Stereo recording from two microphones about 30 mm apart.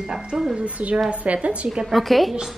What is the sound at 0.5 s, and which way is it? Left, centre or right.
A woman's voice, right.